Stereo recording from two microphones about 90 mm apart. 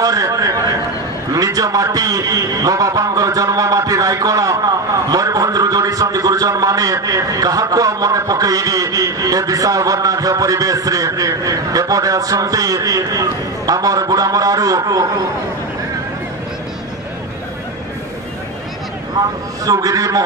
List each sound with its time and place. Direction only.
0.0 s a man's voice: 40° right (ahead or behind)
19.1 s a man's voice: 40° right (ahead or behind)